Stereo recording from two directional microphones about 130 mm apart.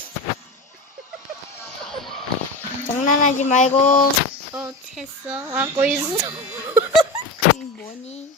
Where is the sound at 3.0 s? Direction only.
75° left (ahead or behind).